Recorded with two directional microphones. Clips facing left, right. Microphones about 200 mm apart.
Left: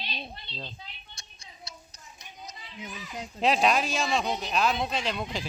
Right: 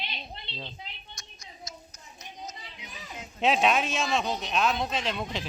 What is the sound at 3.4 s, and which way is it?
Speech, centre (ahead or behind).